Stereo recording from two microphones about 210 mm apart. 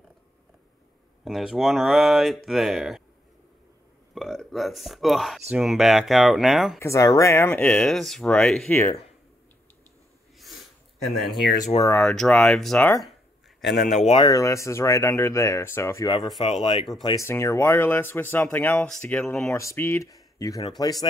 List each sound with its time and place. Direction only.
1.2 s speech: centre (ahead or behind)
4.1 s speech: centre (ahead or behind)
6.8 s speech: 15° left (ahead or behind)
10.4 s a sound: centre (ahead or behind)
11.8 s speech: 10° left (ahead or behind)
13.8 s speech: 35° left (ahead or behind)
14.2 s speech: 15° left (ahead or behind)